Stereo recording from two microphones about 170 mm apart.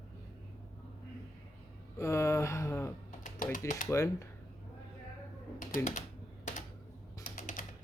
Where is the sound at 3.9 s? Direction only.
15° left (ahead or behind).